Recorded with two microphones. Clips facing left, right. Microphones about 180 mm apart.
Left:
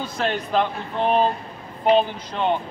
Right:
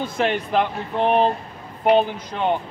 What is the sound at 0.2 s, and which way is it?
Speech, 15° right (ahead or behind).